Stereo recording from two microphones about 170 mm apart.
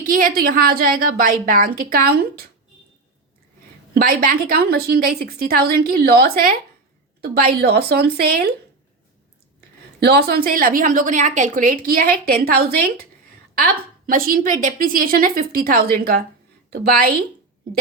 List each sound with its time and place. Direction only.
0.0 s a woman's voice: 55° right (ahead or behind)
3.9 s a woman's voice: 55° right (ahead or behind)
10.0 s a woman's voice: 70° right (ahead or behind)
14.1 s a woman's voice: 55° right (ahead or behind)